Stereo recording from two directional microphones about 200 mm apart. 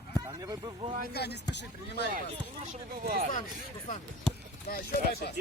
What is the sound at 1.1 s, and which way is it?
Speech, 55° left (ahead or behind).